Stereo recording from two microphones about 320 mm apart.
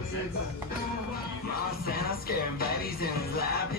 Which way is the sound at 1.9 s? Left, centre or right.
Left.